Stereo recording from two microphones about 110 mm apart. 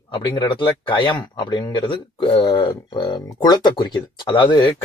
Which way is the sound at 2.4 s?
40° left (ahead or behind).